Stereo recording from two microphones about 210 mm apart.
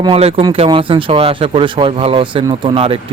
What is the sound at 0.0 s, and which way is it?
Speech, 25° right (ahead or behind).